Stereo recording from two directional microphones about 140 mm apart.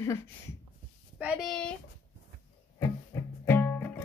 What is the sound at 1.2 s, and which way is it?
Speech, 10° right (ahead or behind).